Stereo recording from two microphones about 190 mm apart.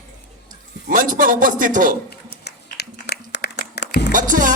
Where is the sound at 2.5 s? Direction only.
60° left (ahead or behind).